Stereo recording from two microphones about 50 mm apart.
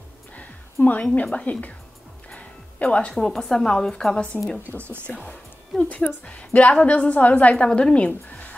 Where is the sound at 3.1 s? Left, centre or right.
Centre.